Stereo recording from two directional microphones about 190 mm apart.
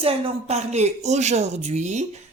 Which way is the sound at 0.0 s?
30° right (ahead or behind).